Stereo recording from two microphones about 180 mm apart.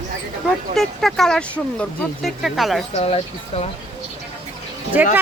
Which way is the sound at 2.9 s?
35° left (ahead or behind).